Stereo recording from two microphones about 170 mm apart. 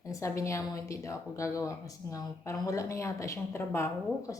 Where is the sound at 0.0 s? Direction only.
20° left (ahead or behind).